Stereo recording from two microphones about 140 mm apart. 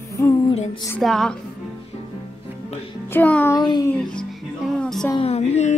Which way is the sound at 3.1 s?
10° left (ahead or behind).